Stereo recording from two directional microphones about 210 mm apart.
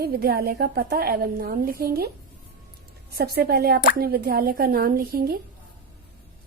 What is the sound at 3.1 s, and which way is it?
A woman's voice, 45° right (ahead or behind).